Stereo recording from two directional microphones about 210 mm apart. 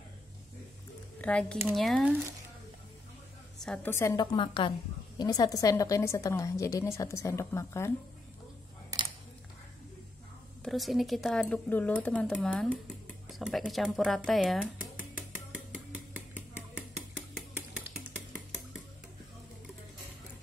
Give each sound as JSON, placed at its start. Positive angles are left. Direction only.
{"t": 1.2, "sound": "speech", "side_deg": 5}
{"t": 3.6, "sound": "a woman's voice", "side_deg": 5}
{"t": 10.6, "sound": "speech", "side_deg": 0}
{"t": 15.0, "sound": "a sound", "side_deg": -5}